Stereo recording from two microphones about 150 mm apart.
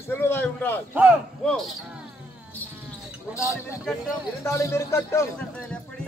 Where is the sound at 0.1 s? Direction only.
10° left (ahead or behind).